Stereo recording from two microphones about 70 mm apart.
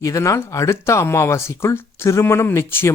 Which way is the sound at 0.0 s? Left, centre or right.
Left.